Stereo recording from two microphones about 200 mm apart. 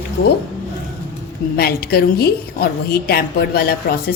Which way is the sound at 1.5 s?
50° left (ahead or behind).